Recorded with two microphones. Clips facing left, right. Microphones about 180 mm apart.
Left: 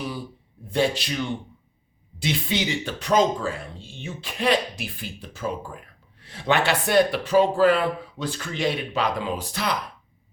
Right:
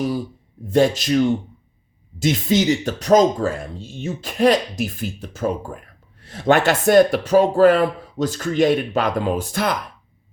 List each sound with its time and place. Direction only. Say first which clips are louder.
0.7 s speech: right 7 dB; 45° right (ahead or behind)